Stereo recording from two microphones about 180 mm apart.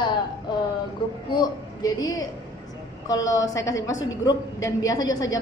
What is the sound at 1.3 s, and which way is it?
Speech, 20° left (ahead or behind).